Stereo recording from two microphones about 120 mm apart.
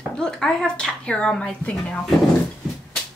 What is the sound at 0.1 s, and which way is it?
Speech, 5° left (ahead or behind).